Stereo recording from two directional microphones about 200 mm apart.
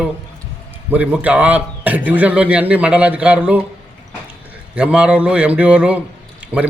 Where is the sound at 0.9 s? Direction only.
5° right (ahead or behind).